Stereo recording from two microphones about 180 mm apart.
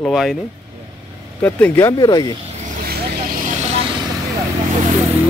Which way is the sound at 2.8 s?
50° right (ahead or behind).